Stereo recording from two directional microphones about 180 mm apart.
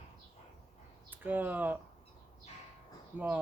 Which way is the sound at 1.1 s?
10° right (ahead or behind).